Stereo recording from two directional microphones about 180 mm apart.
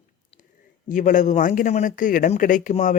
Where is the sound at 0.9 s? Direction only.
45° left (ahead or behind).